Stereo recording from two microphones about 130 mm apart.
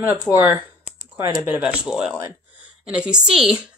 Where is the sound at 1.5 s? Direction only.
10° right (ahead or behind).